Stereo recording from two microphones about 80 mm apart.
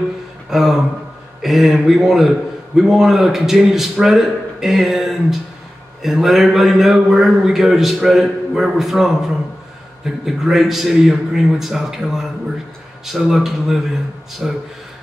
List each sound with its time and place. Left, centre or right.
0.5 s a man's voice: centre